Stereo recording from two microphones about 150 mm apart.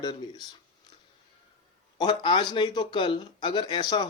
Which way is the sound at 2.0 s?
30° left (ahead or behind).